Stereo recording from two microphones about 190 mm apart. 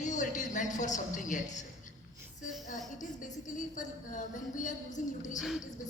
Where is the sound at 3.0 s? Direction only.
40° left (ahead or behind).